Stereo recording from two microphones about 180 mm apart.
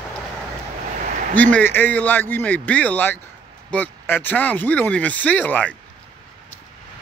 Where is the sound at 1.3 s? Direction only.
10° left (ahead or behind).